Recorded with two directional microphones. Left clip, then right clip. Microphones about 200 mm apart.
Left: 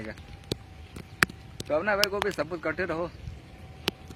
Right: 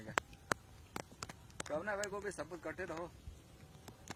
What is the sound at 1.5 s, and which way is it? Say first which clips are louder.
Speech: left 14 dB; 20° left (ahead or behind).